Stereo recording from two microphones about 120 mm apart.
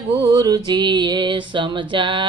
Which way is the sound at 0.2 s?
30° right (ahead or behind).